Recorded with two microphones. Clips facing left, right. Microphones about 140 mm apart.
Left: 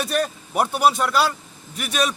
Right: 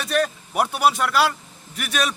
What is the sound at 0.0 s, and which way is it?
Vehicle, centre (ahead or behind).